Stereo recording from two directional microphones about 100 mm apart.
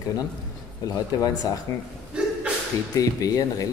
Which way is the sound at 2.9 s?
40° left (ahead or behind).